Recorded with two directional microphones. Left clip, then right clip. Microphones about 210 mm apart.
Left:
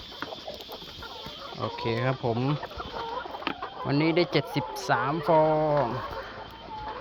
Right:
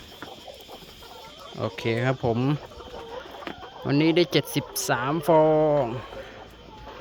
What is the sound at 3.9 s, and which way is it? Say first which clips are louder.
Speech: right 3 dB; 35° right (ahead or behind).